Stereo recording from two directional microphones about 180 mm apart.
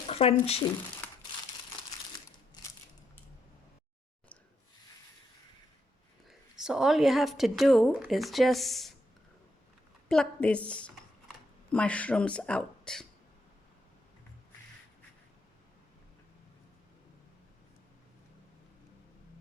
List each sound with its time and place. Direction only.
0.1 s a sound: 35° left (ahead or behind)
0.4 s speech: 35° left (ahead or behind)
6.6 s a woman's voice: 5° right (ahead or behind)
10.1 s speech: 5° left (ahead or behind)